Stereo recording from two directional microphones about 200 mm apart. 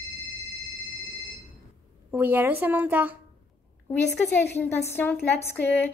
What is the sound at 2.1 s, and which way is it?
A woman's voice, 10° right (ahead or behind).